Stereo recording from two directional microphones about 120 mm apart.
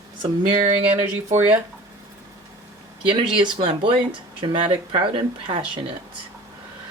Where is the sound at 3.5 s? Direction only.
45° right (ahead or behind).